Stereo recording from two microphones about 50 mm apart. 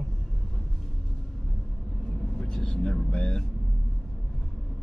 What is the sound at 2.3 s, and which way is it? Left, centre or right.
Speech, centre.